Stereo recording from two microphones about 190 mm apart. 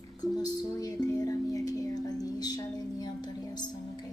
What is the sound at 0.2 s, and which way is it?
Music, 20° left (ahead or behind).